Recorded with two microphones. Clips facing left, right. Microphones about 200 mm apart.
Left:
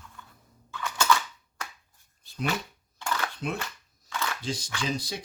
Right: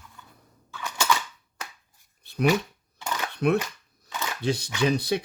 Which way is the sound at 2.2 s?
65° right (ahead or behind).